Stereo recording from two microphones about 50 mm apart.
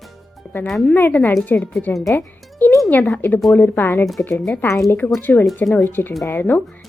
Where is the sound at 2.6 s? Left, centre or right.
Left.